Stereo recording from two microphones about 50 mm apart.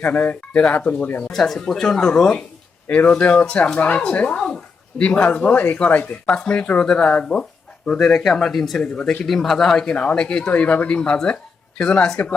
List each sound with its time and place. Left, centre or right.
0.0 s speech: left
0.5 s speech: left
1.3 s speech: centre
2.8 s speech: left
3.2 s speech: left
4.4 s a sound: centre
5.0 s speech: left
6.2 s speech: left
7.9 s speech: centre
8.8 s speech: centre
9.2 s speech: centre
10.5 s speech: left